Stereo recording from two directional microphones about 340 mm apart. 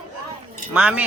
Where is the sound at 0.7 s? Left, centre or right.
Centre.